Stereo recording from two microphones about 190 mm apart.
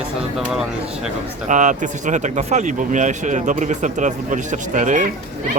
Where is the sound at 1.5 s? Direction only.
40° right (ahead or behind).